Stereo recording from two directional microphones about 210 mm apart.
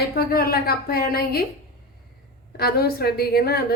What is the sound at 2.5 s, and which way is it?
A woman's voice, 50° left (ahead or behind).